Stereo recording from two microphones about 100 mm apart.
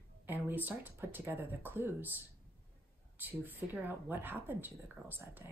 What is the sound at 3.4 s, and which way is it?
Speech, 20° right (ahead or behind).